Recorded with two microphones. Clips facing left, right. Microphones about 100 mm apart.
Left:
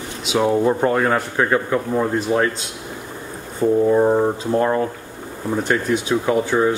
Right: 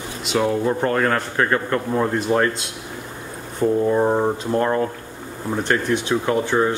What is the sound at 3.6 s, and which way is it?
Speech, centre (ahead or behind).